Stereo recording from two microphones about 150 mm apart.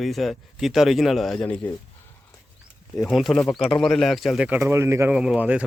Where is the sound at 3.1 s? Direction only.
Centre (ahead or behind).